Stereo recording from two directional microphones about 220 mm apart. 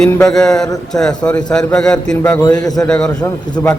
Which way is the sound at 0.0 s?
5° left (ahead or behind).